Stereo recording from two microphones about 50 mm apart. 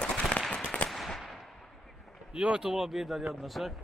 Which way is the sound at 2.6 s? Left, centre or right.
Centre.